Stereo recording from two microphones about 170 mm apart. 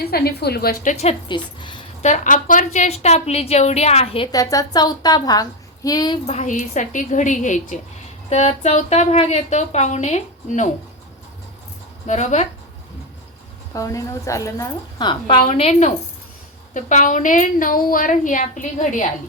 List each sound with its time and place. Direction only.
0.0 s a woman's voice: 65° left (ahead or behind); by 4.3 s 35° left (ahead or behind)
4.3 s a woman's voice: 20° left (ahead or behind)
6.2 s speech: 45° left (ahead or behind)
12.0 s a woman's voice: 40° left (ahead or behind)
13.7 s a woman's voice: 20° left (ahead or behind)
15.4 s a woman's voice: 40° left (ahead or behind)